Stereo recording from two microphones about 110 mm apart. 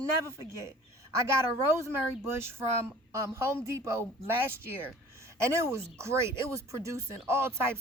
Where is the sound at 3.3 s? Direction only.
25° right (ahead or behind).